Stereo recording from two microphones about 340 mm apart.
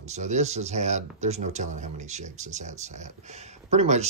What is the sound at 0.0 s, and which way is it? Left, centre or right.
Speech, centre.